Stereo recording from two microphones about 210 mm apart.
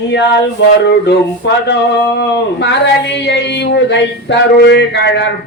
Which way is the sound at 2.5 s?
55° left (ahead or behind).